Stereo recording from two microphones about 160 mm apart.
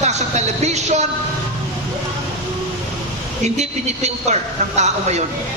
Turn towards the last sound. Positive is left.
turn(degrees=-45)  # may be behind; listen again after turning